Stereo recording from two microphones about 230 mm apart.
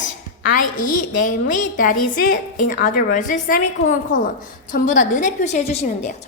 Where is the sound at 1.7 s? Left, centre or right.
Left.